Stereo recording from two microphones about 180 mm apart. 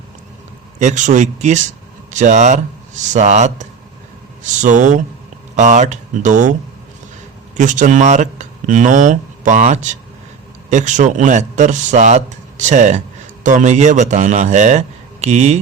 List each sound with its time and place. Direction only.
0.8 s speech: 40° right (ahead or behind)
7.5 s a man's voice: 45° right (ahead or behind)